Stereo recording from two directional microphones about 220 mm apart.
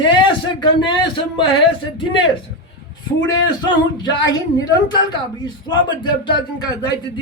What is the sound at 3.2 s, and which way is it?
Speech, 20° left (ahead or behind).